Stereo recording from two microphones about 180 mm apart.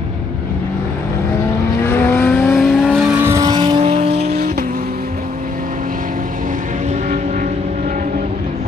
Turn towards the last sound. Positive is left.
turn(degrees=-40)  # may be behind; listen again after turning